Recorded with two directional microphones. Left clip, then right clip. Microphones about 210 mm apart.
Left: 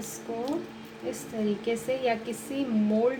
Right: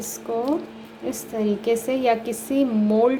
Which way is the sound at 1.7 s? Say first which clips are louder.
Right 8 dB; 30° right (ahead or behind).